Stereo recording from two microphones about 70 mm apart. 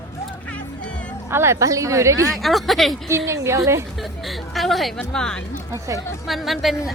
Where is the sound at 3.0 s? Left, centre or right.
Right.